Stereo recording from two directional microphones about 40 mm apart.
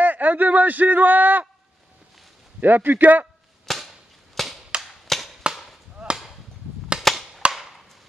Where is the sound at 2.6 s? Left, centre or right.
Right.